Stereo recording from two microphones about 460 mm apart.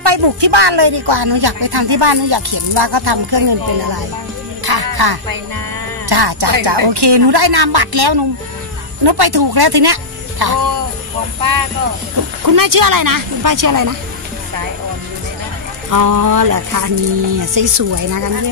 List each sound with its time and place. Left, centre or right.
0.0 s speech: right
12.4 s speech: right
15.9 s speech: right